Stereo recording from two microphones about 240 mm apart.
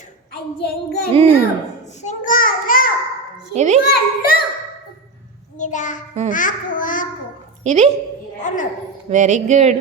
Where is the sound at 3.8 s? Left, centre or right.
Left.